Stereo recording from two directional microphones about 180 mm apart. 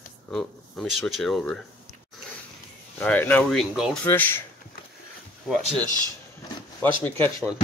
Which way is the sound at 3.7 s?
5° right (ahead or behind).